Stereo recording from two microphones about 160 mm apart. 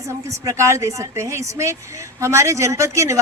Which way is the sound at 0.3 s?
20° right (ahead or behind).